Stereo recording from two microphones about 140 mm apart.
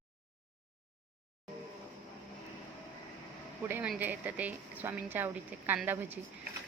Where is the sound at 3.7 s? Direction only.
10° right (ahead or behind).